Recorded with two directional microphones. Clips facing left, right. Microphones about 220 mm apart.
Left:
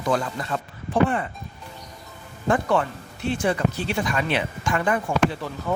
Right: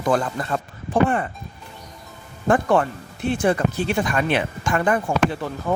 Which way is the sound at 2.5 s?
50° right (ahead or behind).